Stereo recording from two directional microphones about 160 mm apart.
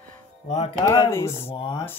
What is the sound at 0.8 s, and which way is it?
Speech, 20° left (ahead or behind).